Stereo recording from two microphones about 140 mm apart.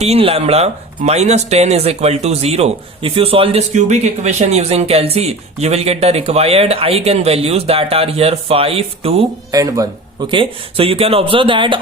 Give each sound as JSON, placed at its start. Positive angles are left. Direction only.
{"t": 0.0, "sound": "speech", "side_deg": -45}
{"t": 3.8, "sound": "speech", "side_deg": -55}
{"t": 9.5, "sound": "speech", "side_deg": -25}